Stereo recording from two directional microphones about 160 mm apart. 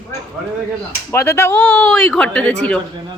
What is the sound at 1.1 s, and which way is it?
Speech, 15° left (ahead or behind).